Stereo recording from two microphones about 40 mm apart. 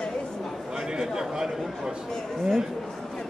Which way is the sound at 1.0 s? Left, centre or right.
Centre.